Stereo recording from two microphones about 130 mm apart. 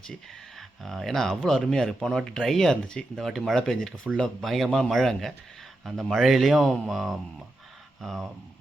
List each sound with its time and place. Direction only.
0.8 s speech: centre (ahead or behind)